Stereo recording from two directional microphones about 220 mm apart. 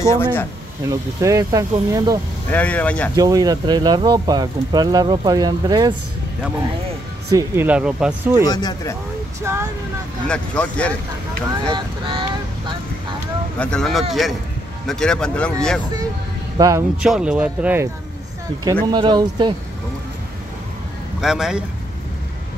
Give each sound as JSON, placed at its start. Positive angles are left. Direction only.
{"t": 0.0, "sound": "speech", "side_deg": 10}
{"t": 0.8, "sound": "speech", "side_deg": -15}
{"t": 2.5, "sound": "speech", "side_deg": 5}
{"t": 3.2, "sound": "speech", "side_deg": -15}
{"t": 7.2, "sound": "speech", "side_deg": -10}
{"t": 8.5, "sound": "speech", "side_deg": 15}
{"t": 9.4, "sound": "speech", "side_deg": -10}
{"t": 10.2, "sound": "speech", "side_deg": 5}
{"t": 11.6, "sound": "speech", "side_deg": -20}
{"t": 13.6, "sound": "speech", "side_deg": 5}
{"t": 16.5, "sound": "a man's voice", "side_deg": -15}
{"t": 17.0, "sound": "speech", "side_deg": -5}
{"t": 18.9, "sound": "speech", "side_deg": -20}
{"t": 21.2, "sound": "speech", "side_deg": 0}